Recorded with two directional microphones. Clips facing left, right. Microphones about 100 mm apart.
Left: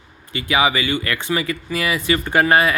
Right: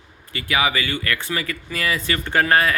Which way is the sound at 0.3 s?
20° left (ahead or behind).